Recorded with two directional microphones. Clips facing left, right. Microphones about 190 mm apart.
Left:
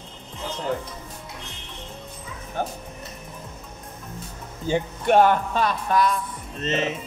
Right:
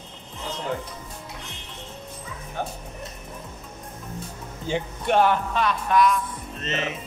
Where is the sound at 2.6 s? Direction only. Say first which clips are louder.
Left 3 dB; 45° left (ahead or behind).